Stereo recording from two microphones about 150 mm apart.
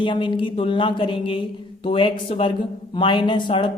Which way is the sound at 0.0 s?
35° left (ahead or behind).